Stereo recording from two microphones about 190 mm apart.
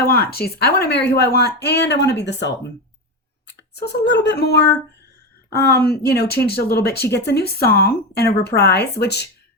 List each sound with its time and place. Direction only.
0.1 s speech: 55° left (ahead or behind)